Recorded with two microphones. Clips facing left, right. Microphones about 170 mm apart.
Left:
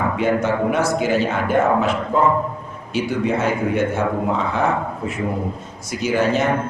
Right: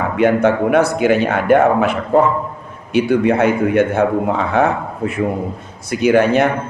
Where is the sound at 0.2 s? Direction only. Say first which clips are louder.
Right 7 dB; 60° right (ahead or behind).